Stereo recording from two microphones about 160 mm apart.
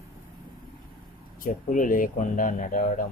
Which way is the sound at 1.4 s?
55° left (ahead or behind).